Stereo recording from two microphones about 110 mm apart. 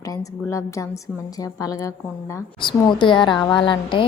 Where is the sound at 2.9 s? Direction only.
45° left (ahead or behind).